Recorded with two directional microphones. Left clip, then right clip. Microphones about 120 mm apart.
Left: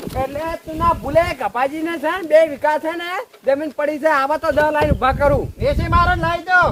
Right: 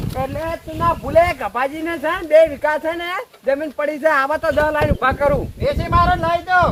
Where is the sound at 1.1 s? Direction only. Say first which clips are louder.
Right 2 dB; 90° left.